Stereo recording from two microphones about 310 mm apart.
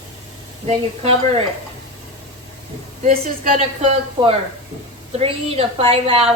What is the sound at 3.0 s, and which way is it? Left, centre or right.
A woman's voice, right.